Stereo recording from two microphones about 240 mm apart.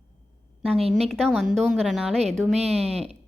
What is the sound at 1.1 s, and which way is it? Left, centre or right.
A woman's voice, centre.